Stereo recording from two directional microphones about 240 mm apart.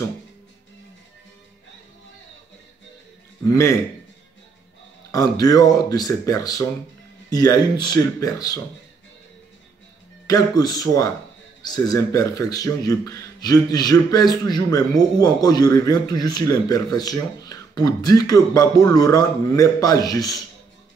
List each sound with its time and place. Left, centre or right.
3.4 s speech: centre
5.1 s speech: centre
10.2 s speech: centre